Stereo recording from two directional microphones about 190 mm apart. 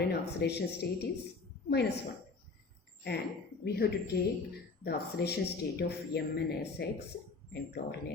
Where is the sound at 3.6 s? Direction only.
55° left (ahead or behind).